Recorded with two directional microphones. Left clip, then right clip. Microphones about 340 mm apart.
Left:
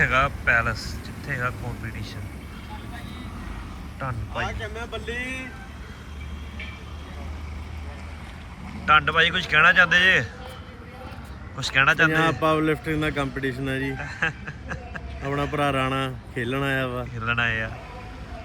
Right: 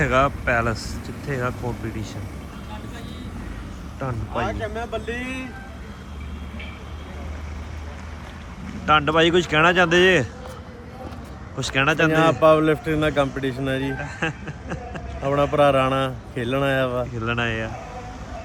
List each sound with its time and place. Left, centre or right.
0.0 s a man's voice: centre
4.4 s speech: right
8.9 s a man's voice: centre
11.6 s a man's voice: centre